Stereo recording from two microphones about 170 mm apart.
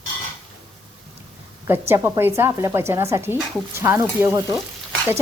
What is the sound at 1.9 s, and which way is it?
Speech, 15° right (ahead or behind).